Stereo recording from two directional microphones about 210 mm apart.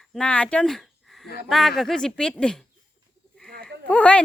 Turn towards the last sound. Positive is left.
turn(degrees=5)  # may be behind; listen again after turning